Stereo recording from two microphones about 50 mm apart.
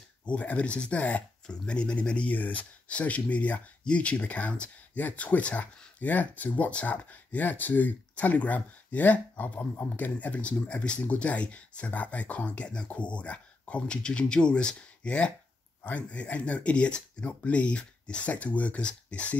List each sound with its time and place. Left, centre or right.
0.2 s speech: left
1.5 s speech: centre